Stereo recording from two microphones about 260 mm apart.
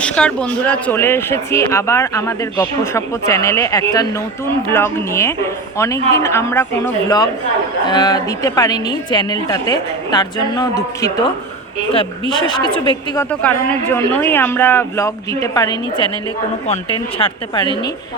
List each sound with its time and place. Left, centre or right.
0.0 s speech: centre
12.3 s speech: centre
13.1 s speech: centre
17.2 s speech: centre